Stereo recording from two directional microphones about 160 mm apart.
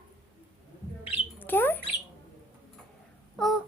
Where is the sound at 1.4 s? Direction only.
10° left (ahead or behind).